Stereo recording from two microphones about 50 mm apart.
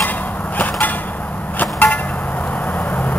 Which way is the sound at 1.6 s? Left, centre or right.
Left.